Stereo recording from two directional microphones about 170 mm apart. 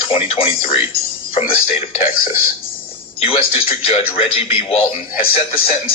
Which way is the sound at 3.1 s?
35° left (ahead or behind).